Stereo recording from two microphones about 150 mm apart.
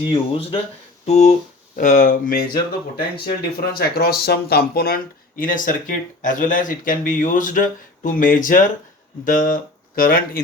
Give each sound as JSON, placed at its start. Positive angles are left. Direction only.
{"t": 0.0, "sound": "speech", "side_deg": 35}
{"t": 1.0, "sound": "speech", "side_deg": 45}
{"t": 3.2, "sound": "speech", "side_deg": 90}